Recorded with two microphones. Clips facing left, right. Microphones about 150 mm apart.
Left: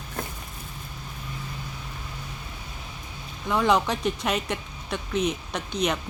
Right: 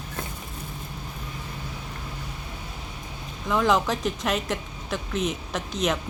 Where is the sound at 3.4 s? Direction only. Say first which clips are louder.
Even; centre (ahead or behind).